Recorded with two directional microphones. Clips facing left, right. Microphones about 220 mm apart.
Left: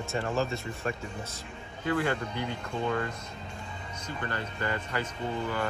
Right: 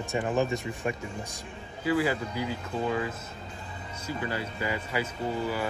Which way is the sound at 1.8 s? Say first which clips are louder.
Right 2 dB; 5° right (ahead or behind).